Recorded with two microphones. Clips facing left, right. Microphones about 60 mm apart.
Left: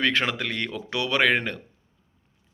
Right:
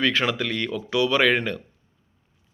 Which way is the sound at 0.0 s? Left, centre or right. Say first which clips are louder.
Right 2 dB; left.